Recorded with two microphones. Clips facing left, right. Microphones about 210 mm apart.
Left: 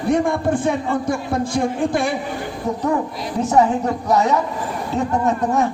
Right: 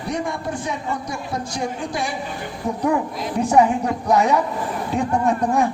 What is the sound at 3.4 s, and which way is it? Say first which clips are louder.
Speech: even; 15° right (ahead or behind).